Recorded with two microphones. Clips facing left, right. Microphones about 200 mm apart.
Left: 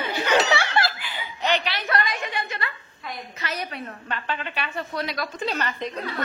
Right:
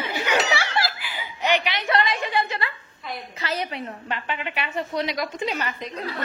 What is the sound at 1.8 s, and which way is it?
A woman's voice, 25° right (ahead or behind).